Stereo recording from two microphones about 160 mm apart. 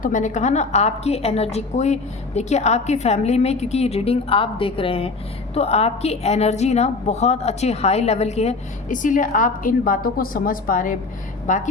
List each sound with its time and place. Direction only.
0.0 s a woman's voice: 50° left (ahead or behind)